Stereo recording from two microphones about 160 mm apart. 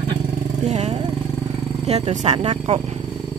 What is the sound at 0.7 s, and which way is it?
Speech, 45° right (ahead or behind).